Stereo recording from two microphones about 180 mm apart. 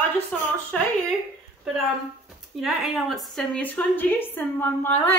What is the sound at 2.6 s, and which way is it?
A woman's voice, 5° right (ahead or behind).